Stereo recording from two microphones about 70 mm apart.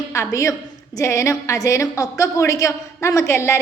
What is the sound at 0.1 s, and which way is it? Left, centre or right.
A woman's voice, left.